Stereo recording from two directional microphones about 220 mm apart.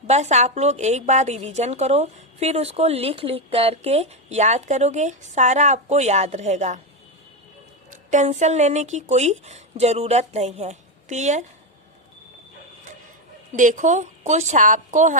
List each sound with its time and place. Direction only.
0.1 s a woman's voice: 30° right (ahead or behind)
8.1 s a woman's voice: 35° right (ahead or behind)
13.5 s a woman's voice: 35° right (ahead or behind)